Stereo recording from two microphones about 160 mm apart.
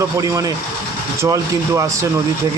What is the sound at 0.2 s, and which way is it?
Speech, 20° right (ahead or behind).